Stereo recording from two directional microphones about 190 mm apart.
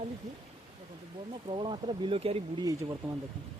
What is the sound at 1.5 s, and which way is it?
Speech, 25° right (ahead or behind).